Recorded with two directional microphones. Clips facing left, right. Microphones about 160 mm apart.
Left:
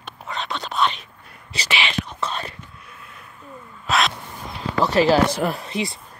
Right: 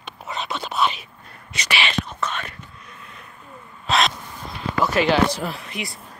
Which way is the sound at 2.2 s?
30° left (ahead or behind).